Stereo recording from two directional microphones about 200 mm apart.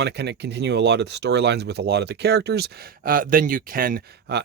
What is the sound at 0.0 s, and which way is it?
Speech, 55° right (ahead or behind).